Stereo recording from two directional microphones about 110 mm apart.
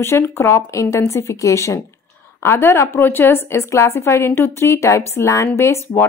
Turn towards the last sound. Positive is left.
turn(degrees=25)  # may be behind; listen again after turning